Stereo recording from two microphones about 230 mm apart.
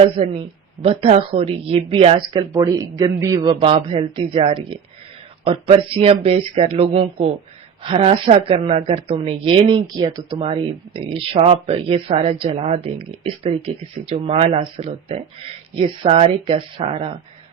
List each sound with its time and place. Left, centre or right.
0.0 s speech: right